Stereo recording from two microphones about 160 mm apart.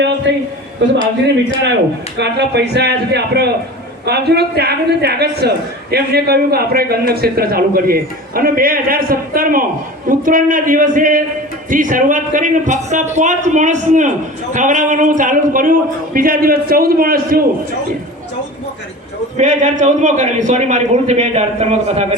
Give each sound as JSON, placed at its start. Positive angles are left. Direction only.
{"t": 0.3, "sound": "speech", "side_deg": -90}
{"t": 2.1, "sound": "a man's voice", "side_deg": -90}
{"t": 19.4, "sound": "a man's voice", "side_deg": -50}